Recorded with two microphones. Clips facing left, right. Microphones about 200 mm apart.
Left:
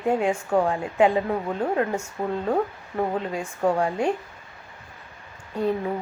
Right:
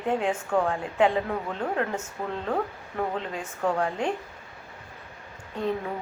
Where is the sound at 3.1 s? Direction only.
10° left (ahead or behind).